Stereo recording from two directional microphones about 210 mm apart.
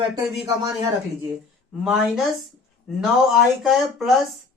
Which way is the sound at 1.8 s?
Centre (ahead or behind).